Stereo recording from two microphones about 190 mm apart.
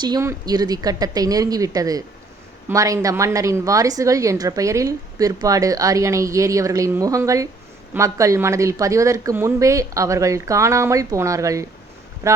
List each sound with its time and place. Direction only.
0.0 s a woman's voice: 20° right (ahead or behind)